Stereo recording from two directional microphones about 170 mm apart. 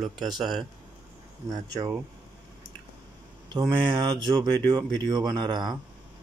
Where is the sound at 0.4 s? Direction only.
25° right (ahead or behind).